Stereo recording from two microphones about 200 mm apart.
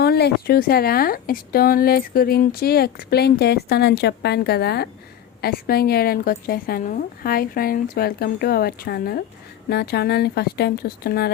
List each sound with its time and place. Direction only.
0.0 s speech: 55° left (ahead or behind)